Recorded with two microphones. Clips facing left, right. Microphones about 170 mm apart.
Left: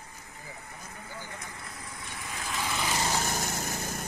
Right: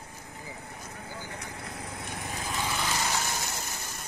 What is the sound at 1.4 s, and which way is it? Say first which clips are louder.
Speech: right 4 dB; 65° right (ahead or behind).